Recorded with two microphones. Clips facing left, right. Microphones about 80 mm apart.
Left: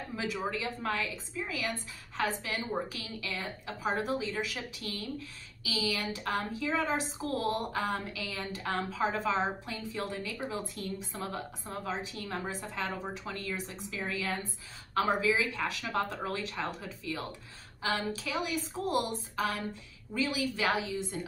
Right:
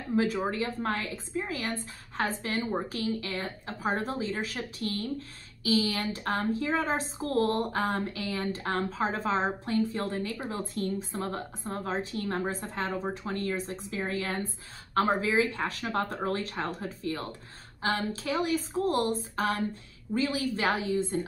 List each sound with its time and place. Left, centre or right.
0.1 s a woman's voice: right
20.2 s a woman's voice: right